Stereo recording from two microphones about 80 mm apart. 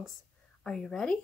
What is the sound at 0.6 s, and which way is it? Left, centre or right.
Speech, centre.